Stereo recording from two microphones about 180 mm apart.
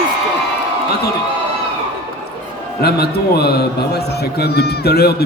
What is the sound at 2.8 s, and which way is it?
A man's voice, 60° left (ahead or behind).